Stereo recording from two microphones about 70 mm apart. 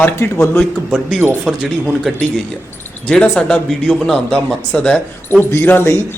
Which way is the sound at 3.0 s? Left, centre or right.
Centre.